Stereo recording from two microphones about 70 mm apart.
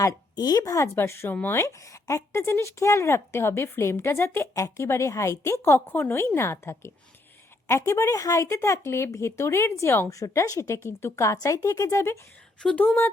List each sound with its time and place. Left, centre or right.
0.3 s speech: left
0.9 s speech: left
1.3 s speech: left
1.5 s speech: left
12.5 s speech: centre